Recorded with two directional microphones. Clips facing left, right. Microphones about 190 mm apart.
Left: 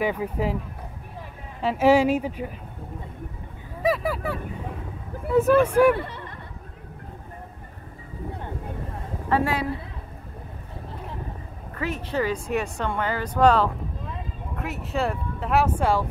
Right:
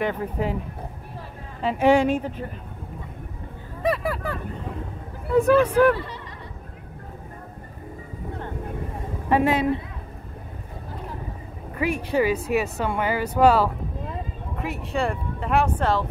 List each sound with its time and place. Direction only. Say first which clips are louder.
0.0 s speech: even; 5° left (ahead or behind)
1.6 s speech: even; centre (ahead or behind)
3.8 s speech: left 1 dB; centre (ahead or behind)
5.6 s speech: even; 10° left (ahead or behind)
5.9 s a sound: left 2 dB; 55° left (ahead or behind)
9.3 s a man's voice: right 4 dB; 20° right (ahead or behind)
11.7 s a woman's voice: right 4 dB; 10° right (ahead or behind); by 16.1 s 10° left (ahead or behind)